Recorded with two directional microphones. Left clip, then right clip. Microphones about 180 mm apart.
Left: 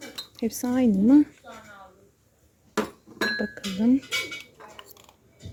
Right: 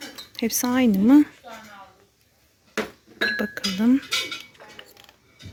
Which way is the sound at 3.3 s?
Centre (ahead or behind).